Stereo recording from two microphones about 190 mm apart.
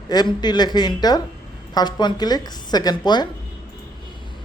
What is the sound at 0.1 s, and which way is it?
Speech, 20° left (ahead or behind).